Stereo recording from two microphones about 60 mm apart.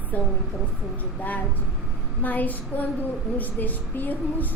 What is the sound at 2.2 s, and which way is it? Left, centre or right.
A woman's voice, left.